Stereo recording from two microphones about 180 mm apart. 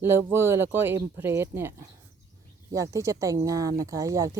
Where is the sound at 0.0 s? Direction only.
15° right (ahead or behind).